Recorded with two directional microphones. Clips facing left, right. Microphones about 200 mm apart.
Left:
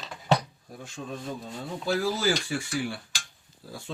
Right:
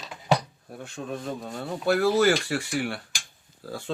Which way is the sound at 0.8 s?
65° right (ahead or behind).